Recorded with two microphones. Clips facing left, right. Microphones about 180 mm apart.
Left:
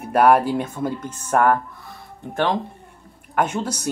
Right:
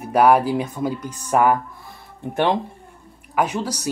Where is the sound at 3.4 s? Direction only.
5° right (ahead or behind).